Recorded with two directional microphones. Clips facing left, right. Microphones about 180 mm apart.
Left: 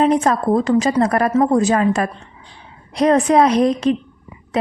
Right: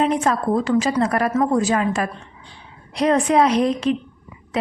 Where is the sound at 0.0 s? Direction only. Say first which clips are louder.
Left 4 dB; 40° left (ahead or behind).